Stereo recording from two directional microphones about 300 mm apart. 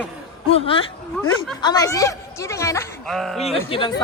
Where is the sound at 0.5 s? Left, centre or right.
Centre.